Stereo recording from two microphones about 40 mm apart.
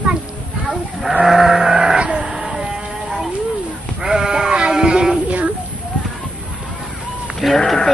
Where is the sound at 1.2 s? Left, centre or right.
Centre.